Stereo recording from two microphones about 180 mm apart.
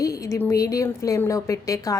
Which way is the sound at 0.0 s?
20° left (ahead or behind).